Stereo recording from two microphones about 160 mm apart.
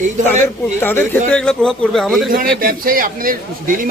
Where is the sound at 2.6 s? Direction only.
65° right (ahead or behind).